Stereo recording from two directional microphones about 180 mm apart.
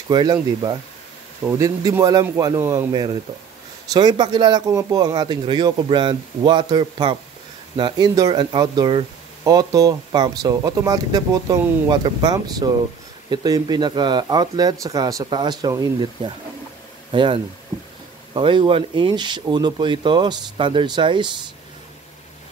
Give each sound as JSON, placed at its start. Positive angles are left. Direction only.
{"t": 0.1, "sound": "a man's voice", "side_deg": -25}